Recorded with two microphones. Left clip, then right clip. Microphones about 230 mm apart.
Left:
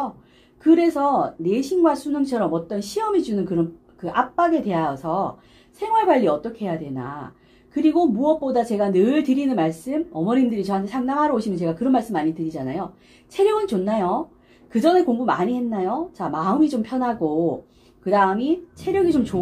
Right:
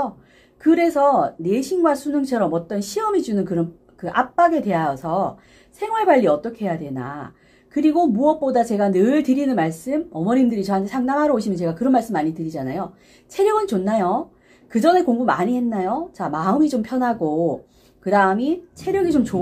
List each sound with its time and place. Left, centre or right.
0.7 s a woman's voice: right